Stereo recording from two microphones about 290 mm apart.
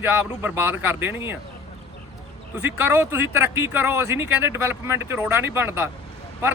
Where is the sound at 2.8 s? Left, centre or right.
Centre.